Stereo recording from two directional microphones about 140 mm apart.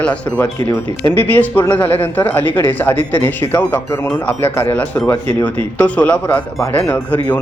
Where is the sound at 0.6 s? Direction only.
20° left (ahead or behind).